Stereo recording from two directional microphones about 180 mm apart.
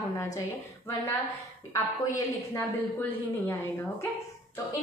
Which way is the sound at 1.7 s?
15° left (ahead or behind).